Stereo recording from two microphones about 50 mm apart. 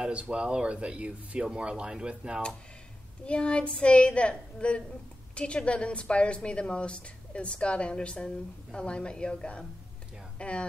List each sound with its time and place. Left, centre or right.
0.0 s speech: right
3.3 s a woman's voice: left